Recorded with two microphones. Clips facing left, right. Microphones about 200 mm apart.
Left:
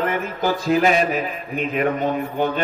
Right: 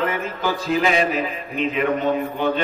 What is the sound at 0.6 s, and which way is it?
Mantra, 50° left (ahead or behind).